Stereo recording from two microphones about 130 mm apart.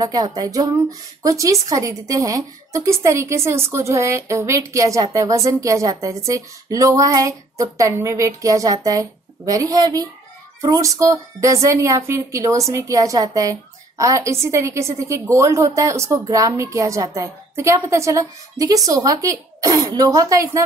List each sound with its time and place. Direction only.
0.0 s a woman's voice: 30° right (ahead or behind)